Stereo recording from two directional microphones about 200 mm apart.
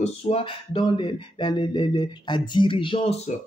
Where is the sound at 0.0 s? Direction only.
30° left (ahead or behind).